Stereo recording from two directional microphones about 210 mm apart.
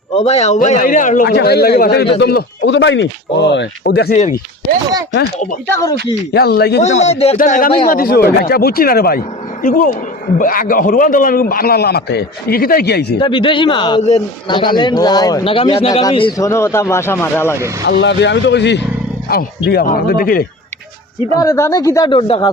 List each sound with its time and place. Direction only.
0.1 s a man's voice: 30° left (ahead or behind)
1.3 s speech: 50° left (ahead or behind)
5.6 s speech: 15° left (ahead or behind)
6.3 s speech: 50° left (ahead or behind)
7.0 s speech: 30° left (ahead or behind); by 13.1 s 50° left (ahead or behind)
13.1 s a man's voice: 25° left (ahead or behind)
17.8 s speech: 55° left (ahead or behind)
21.3 s speech: 15° left (ahead or behind)